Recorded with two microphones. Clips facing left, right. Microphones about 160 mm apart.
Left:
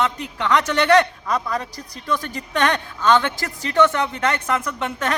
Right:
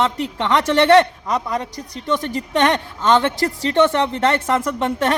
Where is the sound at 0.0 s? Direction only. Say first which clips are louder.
Right 3 dB; 30° right (ahead or behind).